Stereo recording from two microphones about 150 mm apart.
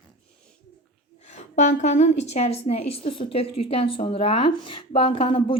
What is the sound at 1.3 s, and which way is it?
A woman's voice, 50° left (ahead or behind).